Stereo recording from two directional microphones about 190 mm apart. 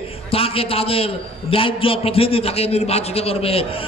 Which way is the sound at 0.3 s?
30° left (ahead or behind).